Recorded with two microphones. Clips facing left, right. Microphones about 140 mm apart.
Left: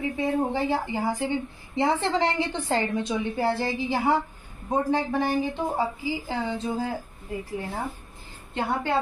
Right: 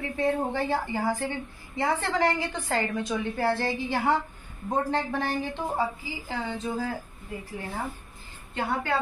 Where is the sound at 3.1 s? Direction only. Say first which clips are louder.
Even; 15° left (ahead or behind).